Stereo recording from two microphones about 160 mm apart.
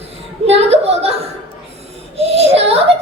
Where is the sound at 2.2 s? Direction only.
40° right (ahead or behind).